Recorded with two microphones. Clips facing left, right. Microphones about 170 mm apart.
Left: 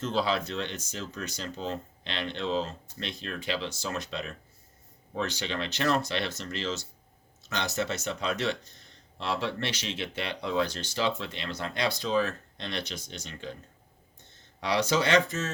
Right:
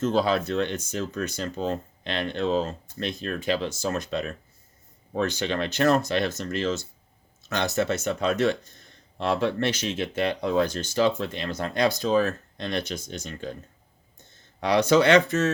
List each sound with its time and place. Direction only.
0.0 s speech: 45° right (ahead or behind)
14.6 s speech: 55° right (ahead or behind)